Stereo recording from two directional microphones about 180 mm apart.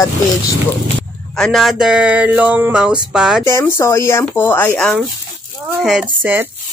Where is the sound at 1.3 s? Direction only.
Centre (ahead or behind).